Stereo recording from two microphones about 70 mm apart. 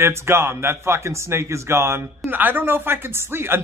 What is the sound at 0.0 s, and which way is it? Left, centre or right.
A man's voice, right.